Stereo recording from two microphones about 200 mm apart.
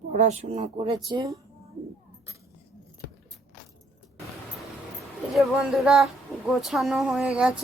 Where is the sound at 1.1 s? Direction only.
15° right (ahead or behind).